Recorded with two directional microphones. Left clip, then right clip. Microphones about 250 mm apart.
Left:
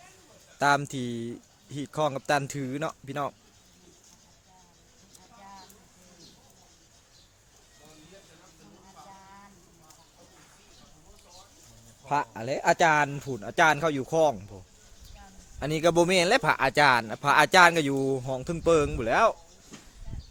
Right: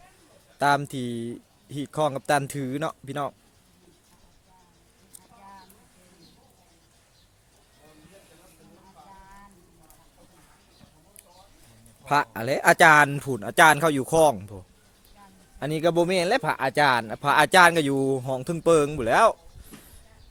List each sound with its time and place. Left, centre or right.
0.6 s a man's voice: centre
12.0 s speech: centre
15.5 s a man's voice: centre